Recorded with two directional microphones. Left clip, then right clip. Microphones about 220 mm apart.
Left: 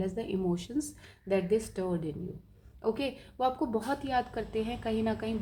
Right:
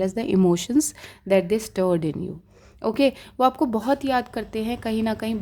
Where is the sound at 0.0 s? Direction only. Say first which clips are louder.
Right 11 dB; 50° right (ahead or behind).